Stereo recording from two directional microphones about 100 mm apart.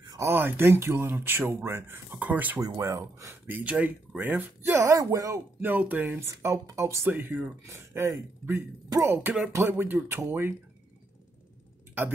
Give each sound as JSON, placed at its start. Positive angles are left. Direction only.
{"t": 0.2, "sound": "speech", "side_deg": -25}
{"t": 2.6, "sound": "speech", "side_deg": -40}
{"t": 3.4, "sound": "speech", "side_deg": -15}
{"t": 5.6, "sound": "speech", "side_deg": -20}
{"t": 7.1, "sound": "speech", "side_deg": -20}